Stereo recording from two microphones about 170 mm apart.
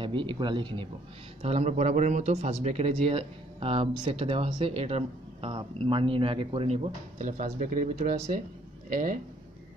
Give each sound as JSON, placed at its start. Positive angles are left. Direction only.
{"t": 0.0, "sound": "speech", "side_deg": -30}